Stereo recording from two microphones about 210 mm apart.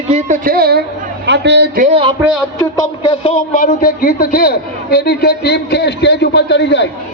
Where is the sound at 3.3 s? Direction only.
40° left (ahead or behind); by 6.9 s 55° left (ahead or behind).